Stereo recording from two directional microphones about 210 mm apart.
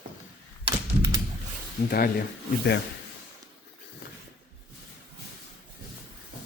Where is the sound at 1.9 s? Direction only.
45° left (ahead or behind).